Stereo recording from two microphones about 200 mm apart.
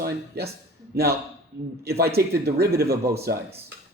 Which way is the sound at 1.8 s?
50° right (ahead or behind).